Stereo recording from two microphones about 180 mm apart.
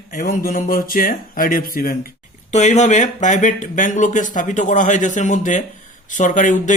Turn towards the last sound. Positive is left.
turn(degrees=45)  # may be behind; listen again after turning